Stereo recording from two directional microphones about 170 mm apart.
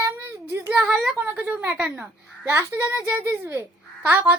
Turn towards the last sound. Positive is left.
turn(degrees=-10)  # may be behind; listen again after turning